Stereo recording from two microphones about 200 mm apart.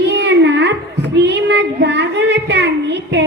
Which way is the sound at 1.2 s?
60° right (ahead or behind).